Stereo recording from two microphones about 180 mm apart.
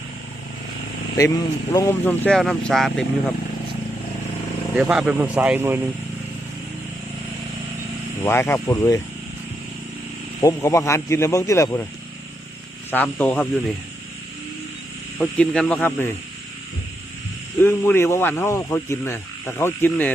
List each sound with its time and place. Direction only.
1.1 s speech: 20° left (ahead or behind); by 3.3 s centre (ahead or behind)
4.7 s speech: 5° right (ahead or behind)
8.2 s speech: 10° left (ahead or behind)
10.4 s speech: 15° left (ahead or behind)
12.9 s speech: 10° left (ahead or behind)
15.2 s speech: 5° left (ahead or behind)
17.6 s speech: 10° left (ahead or behind)